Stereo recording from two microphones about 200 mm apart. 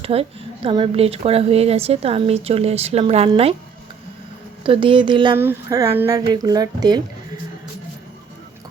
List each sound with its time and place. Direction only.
0.0 s speech: 30° right (ahead or behind)
4.6 s speech: 25° right (ahead or behind)
5.4 s speech: 10° right (ahead or behind)